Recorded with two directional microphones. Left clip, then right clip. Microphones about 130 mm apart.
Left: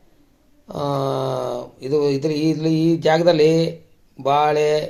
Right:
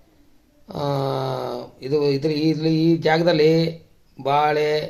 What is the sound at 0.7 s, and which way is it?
Speech, 25° left (ahead or behind).